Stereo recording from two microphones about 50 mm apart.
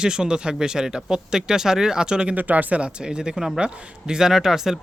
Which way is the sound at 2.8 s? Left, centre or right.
Centre.